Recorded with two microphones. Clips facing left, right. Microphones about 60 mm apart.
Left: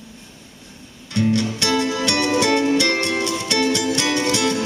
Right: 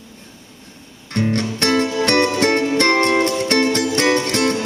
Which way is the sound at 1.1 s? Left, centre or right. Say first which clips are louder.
Even; right.